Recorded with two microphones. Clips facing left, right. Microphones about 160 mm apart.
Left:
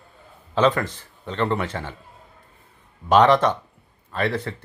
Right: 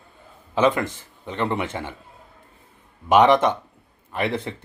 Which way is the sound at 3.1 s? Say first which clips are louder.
Even; 15° right (ahead or behind).